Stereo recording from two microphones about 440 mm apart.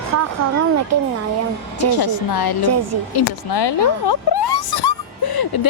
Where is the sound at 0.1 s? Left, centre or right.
Right.